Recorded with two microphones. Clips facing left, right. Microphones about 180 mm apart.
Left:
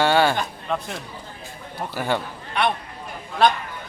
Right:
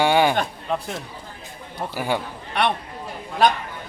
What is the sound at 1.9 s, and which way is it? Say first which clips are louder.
Speech: even; 10° right (ahead or behind).